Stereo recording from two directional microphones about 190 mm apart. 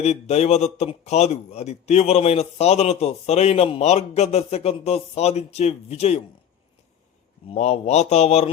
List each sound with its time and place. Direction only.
0.0 s a man's voice: 35° left (ahead or behind)
7.4 s a man's voice: 35° left (ahead or behind)